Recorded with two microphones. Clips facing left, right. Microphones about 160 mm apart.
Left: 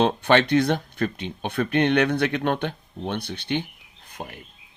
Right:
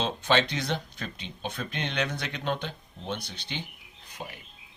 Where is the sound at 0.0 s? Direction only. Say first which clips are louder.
Left 7 dB; 60° left (ahead or behind).